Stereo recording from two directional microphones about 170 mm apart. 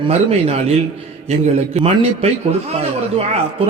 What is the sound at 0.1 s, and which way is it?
A man's voice, 35° right (ahead or behind).